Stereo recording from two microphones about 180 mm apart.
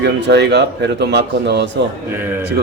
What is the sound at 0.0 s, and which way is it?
Speech, 70° right (ahead or behind).